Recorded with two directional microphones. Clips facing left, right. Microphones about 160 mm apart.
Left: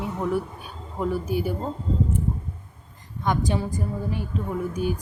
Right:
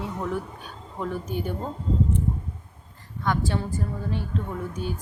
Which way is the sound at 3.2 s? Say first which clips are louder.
Left 2 dB; 15° left (ahead or behind).